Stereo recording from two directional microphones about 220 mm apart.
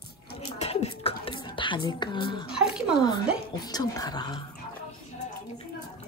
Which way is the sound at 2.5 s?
5° right (ahead or behind).